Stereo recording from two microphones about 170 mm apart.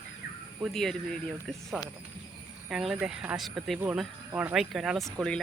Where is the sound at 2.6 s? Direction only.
5° right (ahead or behind).